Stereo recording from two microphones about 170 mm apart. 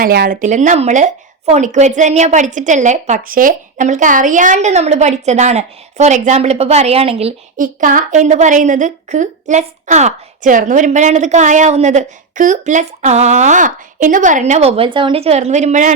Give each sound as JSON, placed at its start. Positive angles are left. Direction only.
{"t": 0.0, "sound": "a woman's voice", "side_deg": -60}
{"t": 7.5, "sound": "a woman's voice", "side_deg": -50}